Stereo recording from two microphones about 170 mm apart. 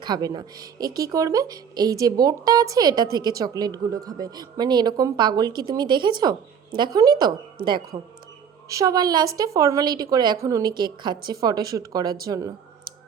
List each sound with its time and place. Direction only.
0.0 s speech: 25° right (ahead or behind)